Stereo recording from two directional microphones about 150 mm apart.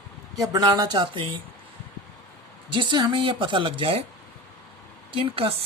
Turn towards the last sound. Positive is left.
turn(degrees=-35)  # may be behind; listen again after turning